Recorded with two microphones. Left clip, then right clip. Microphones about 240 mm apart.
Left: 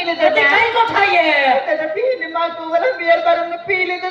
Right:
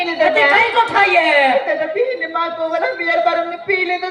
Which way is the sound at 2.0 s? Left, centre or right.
Right.